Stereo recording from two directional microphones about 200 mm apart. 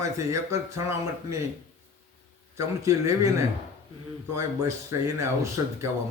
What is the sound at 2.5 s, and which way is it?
Speech, 15° right (ahead or behind).